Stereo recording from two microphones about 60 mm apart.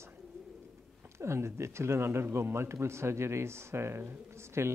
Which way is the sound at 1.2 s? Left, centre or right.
Right.